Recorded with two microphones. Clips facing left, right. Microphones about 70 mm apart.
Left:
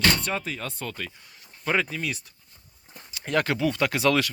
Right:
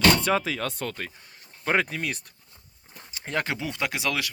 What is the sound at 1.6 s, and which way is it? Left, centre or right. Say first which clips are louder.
Speech: right 1 dB; right.